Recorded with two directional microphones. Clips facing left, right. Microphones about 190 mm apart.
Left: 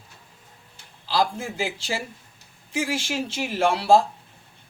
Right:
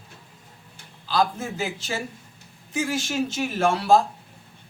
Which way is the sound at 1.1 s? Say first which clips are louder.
Even; 30° left (ahead or behind).